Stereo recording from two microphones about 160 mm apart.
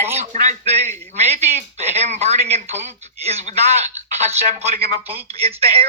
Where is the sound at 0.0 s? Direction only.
40° right (ahead or behind).